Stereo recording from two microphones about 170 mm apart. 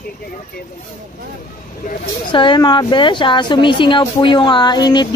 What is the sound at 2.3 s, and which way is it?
Speech, 30° left (ahead or behind).